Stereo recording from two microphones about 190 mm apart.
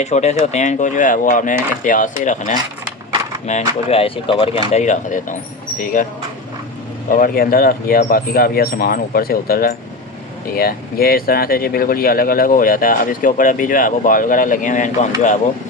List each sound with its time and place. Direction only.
0.0 s speech: 35° left (ahead or behind)
7.1 s speech: 50° left (ahead or behind)